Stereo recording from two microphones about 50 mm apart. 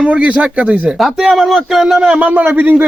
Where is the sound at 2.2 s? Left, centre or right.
Right.